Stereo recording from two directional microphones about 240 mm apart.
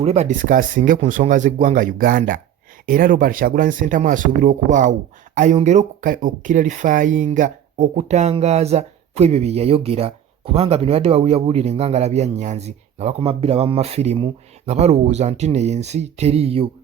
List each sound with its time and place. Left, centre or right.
0.0 s speech: right